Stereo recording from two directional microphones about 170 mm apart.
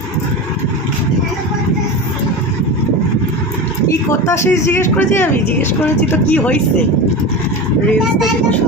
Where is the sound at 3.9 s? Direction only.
15° left (ahead or behind).